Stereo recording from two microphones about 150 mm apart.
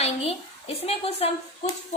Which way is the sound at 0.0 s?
40° left (ahead or behind).